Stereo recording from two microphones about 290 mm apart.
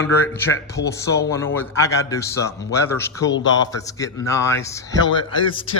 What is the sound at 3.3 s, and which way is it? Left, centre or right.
Speech, left.